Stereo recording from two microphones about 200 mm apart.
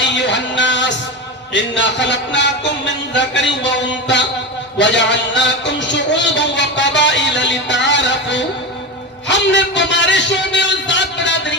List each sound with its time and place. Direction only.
0.0 s music: 60° left (ahead or behind)
1.5 s a man's voice: 60° left (ahead or behind)